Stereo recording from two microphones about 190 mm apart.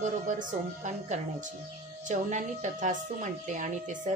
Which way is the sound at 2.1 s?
40° right (ahead or behind).